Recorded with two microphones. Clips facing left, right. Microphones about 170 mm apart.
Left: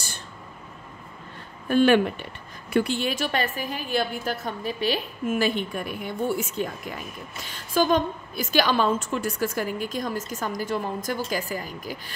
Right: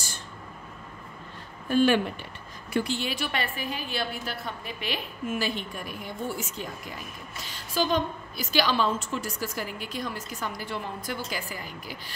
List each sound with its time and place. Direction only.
1.7 s a woman's voice: 60° left (ahead or behind); by 5.0 s 35° left (ahead or behind)
5.4 s a woman's voice: 60° left (ahead or behind)
7.7 s a woman's voice: 50° left (ahead or behind)